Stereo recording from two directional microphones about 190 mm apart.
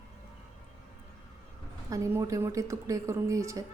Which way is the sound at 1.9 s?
15° right (ahead or behind).